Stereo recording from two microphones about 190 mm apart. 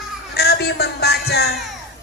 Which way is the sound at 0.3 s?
60° left (ahead or behind).